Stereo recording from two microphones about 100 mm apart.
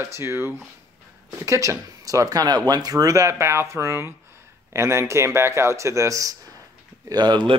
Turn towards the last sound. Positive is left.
turn(degrees=-50)  # may be behind; listen again after turning